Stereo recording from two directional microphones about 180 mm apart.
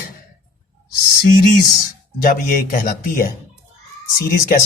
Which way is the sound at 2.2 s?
50° left (ahead or behind).